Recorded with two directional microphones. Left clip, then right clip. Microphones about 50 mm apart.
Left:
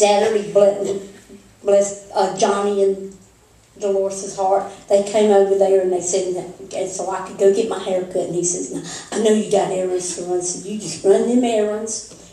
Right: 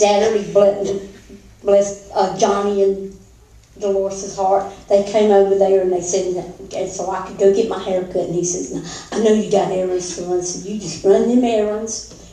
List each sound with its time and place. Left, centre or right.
0.2 s a woman's voice: left